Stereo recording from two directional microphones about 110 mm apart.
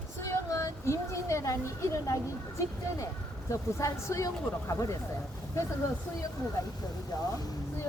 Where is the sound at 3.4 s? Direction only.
30° left (ahead or behind).